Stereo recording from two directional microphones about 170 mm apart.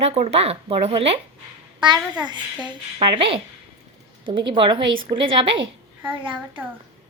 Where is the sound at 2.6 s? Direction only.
30° right (ahead or behind).